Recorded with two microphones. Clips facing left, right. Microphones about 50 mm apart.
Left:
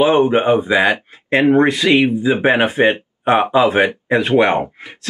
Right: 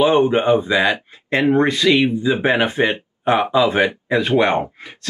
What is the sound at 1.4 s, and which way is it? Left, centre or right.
Speech, left.